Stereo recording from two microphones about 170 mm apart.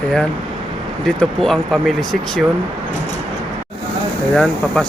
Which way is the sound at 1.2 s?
Centre (ahead or behind).